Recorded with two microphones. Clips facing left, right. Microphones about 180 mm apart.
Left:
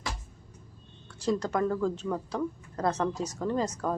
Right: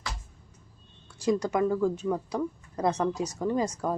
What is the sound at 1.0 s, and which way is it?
Speech, 10° right (ahead or behind).